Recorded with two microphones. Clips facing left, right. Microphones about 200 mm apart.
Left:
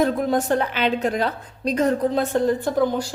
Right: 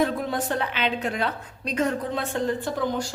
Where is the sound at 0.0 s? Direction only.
40° left (ahead or behind).